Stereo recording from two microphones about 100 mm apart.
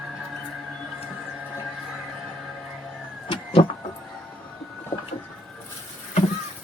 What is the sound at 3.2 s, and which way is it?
Power windows, 65° left (ahead or behind).